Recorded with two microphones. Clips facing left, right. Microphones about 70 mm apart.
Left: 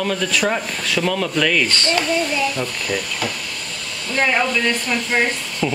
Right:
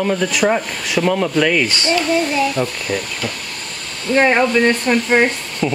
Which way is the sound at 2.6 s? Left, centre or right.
Right.